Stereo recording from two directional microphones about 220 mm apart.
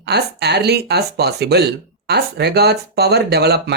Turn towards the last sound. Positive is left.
turn(degrees=-45)  # may be behind; listen again after turning